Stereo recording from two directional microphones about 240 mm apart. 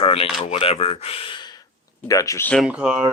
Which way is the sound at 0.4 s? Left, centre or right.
Left.